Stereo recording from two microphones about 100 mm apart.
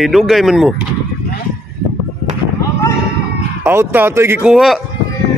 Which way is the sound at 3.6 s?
25° right (ahead or behind).